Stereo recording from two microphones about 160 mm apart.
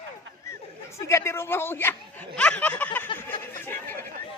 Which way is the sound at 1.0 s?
15° left (ahead or behind).